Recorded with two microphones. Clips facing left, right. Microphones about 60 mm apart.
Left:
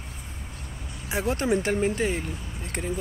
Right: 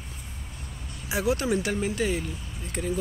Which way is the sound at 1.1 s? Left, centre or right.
Left.